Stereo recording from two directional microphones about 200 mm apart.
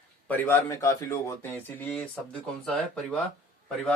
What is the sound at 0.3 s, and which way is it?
Speech, 10° left (ahead or behind).